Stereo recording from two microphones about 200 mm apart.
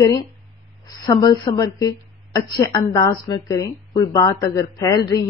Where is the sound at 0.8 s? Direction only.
20° left (ahead or behind).